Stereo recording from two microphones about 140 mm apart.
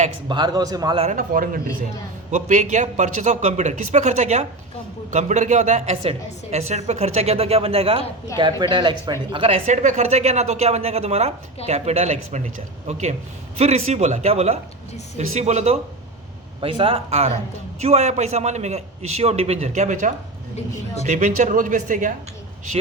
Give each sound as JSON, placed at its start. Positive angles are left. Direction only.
{"t": 0.3, "sound": "a man's voice", "side_deg": -30}
{"t": 1.1, "sound": "a man's voice", "side_deg": -80}
{"t": 2.3, "sound": "a man's voice", "side_deg": -60}
{"t": 9.6, "sound": "a woman's voice", "side_deg": -60}
{"t": 16.6, "sound": "a woman's voice", "side_deg": -40}